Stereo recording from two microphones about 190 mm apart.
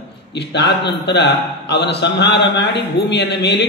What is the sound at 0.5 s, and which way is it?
A man's voice, 65° left (ahead or behind).